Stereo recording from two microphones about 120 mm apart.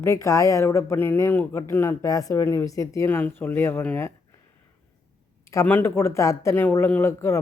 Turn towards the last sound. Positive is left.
turn(degrees=25)  # may be behind; listen again after turning